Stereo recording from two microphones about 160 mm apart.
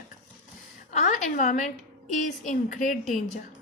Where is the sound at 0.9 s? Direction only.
55° left (ahead or behind).